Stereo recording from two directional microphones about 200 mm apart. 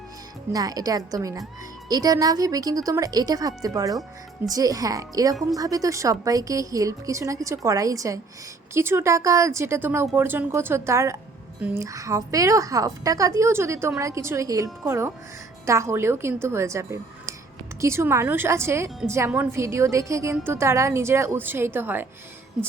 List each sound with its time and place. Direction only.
0.5 s a woman's voice: 20° right (ahead or behind)